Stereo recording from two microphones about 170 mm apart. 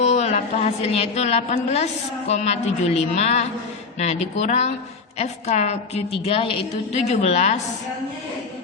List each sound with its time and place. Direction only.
0.0 s a woman's voice: 45° left (ahead or behind)